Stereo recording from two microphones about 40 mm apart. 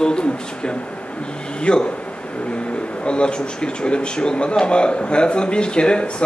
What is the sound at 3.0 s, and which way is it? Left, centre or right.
Speech, left.